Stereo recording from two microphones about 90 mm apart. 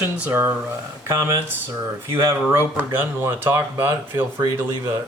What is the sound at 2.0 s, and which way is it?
Speech, 25° right (ahead or behind).